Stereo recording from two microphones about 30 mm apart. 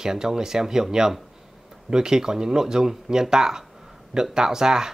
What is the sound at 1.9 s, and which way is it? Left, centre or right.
Speech, right.